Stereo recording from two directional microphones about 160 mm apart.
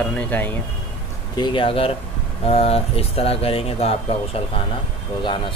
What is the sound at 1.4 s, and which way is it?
Speech, 30° left (ahead or behind).